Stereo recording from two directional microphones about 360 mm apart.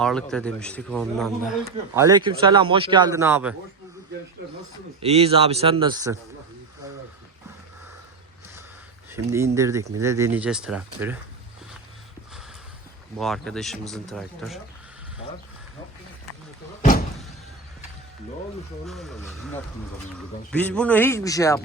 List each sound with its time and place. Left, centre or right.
0.0 s a man's voice: centre
4.9 s speech: centre
9.1 s speech: centre
13.1 s a man's voice: centre
18.9 s a man's voice: centre